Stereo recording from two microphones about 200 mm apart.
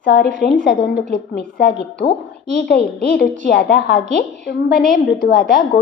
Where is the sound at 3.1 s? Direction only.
55° left (ahead or behind).